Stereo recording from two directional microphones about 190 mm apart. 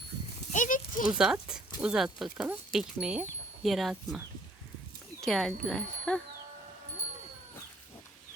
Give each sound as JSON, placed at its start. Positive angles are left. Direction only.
{"t": 0.5, "sound": "a sound", "side_deg": 45}
{"t": 1.0, "sound": "speech", "side_deg": -5}
{"t": 5.2, "sound": "speech", "side_deg": 0}